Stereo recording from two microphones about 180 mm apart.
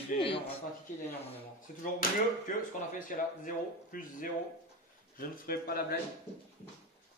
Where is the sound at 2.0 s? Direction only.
45° left (ahead or behind).